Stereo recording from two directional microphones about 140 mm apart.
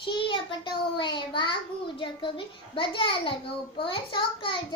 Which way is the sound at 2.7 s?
35° left (ahead or behind).